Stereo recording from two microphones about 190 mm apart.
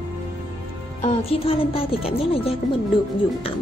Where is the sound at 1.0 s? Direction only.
30° left (ahead or behind).